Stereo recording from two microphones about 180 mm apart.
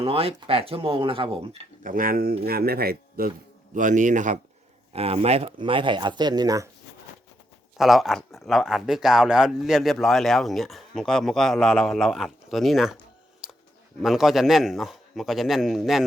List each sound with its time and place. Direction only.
0.0 s speech: 35° right (ahead or behind)
1.8 s a man's voice: 50° right (ahead or behind)
3.8 s a man's voice: 45° right (ahead or behind); by 6.7 s 20° right (ahead or behind)
7.8 s speech: centre (ahead or behind)
14.0 s speech: centre (ahead or behind)